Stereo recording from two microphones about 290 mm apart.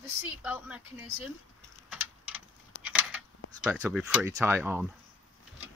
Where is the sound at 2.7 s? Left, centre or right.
Left.